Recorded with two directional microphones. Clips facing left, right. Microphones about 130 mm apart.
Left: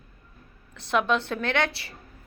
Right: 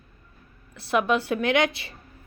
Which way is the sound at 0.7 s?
5° right (ahead or behind).